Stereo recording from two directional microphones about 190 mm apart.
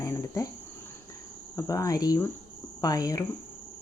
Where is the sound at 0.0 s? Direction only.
15° left (ahead or behind).